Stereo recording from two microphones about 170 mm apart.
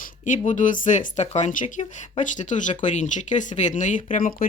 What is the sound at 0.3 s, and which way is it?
Speech, 45° left (ahead or behind).